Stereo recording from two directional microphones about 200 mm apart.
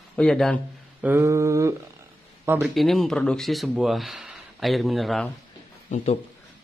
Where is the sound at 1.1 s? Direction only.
15° right (ahead or behind).